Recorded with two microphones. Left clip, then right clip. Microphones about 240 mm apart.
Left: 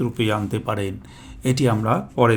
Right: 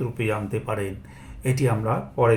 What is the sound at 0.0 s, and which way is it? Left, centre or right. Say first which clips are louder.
Speech: left 4 dB; left.